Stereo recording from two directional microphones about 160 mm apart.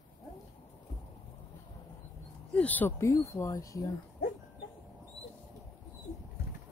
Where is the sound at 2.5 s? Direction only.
10° left (ahead or behind).